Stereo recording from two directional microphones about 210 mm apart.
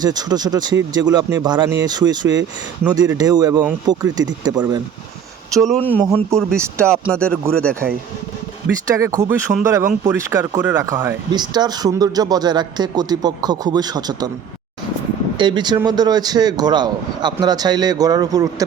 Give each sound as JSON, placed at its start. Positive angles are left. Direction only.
{"t": 0.0, "sound": "speech", "side_deg": -20}
{"t": 5.6, "sound": "speech", "side_deg": 5}
{"t": 6.0, "sound": "speech", "side_deg": -15}
{"t": 6.9, "sound": "speech", "side_deg": 5}
{"t": 9.0, "sound": "speech", "side_deg": -15}
{"t": 15.4, "sound": "speech", "side_deg": -20}